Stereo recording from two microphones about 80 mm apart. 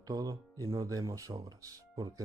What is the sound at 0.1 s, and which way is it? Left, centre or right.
Speech, right.